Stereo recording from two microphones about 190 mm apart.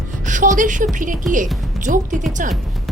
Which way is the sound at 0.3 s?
40° right (ahead or behind).